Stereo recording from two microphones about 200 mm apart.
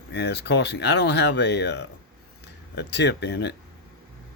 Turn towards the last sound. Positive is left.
turn(degrees=60)  # may be behind; listen again after turning